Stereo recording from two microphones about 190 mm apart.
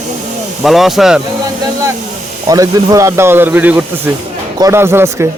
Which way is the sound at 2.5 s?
15° right (ahead or behind).